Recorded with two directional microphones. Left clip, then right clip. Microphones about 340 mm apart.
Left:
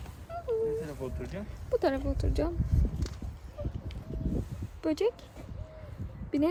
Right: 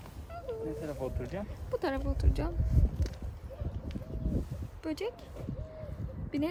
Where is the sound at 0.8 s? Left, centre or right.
Right.